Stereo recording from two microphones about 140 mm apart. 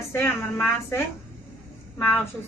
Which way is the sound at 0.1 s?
20° left (ahead or behind).